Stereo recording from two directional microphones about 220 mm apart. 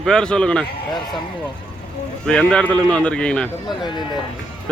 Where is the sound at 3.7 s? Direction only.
20° left (ahead or behind).